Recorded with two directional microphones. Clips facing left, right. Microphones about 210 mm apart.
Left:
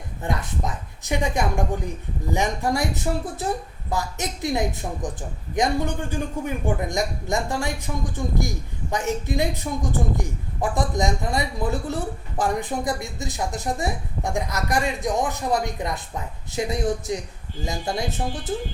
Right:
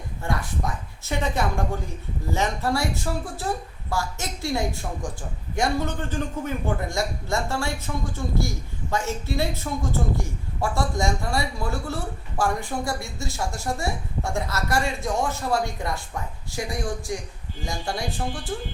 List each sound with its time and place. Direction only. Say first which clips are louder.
0.2 s a man's voice: left 1 dB; 20° left (ahead or behind)